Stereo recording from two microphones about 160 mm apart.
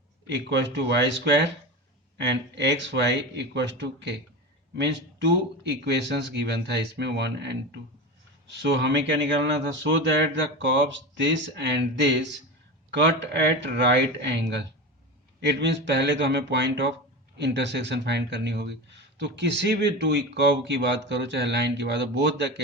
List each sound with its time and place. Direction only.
0.3 s speech: 90° right
8.8 s speech: 90° right